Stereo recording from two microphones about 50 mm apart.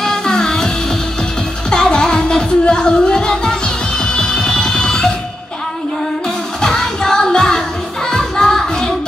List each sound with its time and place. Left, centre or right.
0.0 s music: centre
1.7 s music: centre
6.6 s music: centre